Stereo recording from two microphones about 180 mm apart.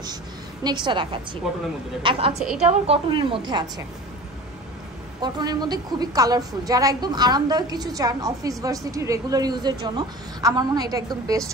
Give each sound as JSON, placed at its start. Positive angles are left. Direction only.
{"t": 0.7, "sound": "a woman's voice", "side_deg": -25}
{"t": 5.2, "sound": "a woman's voice", "side_deg": -25}